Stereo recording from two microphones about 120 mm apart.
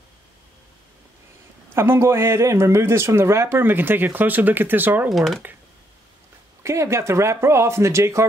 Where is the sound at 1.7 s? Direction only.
20° right (ahead or behind).